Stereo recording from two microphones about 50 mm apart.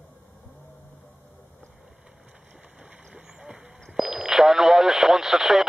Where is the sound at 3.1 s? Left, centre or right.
Centre.